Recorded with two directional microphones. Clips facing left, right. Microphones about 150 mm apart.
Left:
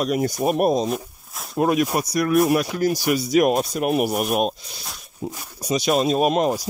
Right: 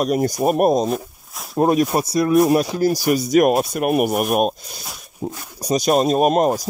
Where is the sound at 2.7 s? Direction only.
35° right (ahead or behind).